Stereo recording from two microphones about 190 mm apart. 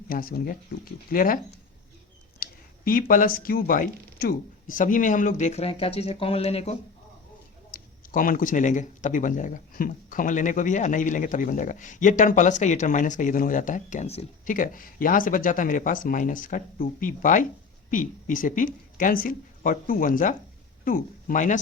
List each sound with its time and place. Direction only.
0.1 s speech: 50° left (ahead or behind)
2.4 s speech: 50° left (ahead or behind); by 6.7 s 30° left (ahead or behind)
7.7 s speech: 45° left (ahead or behind)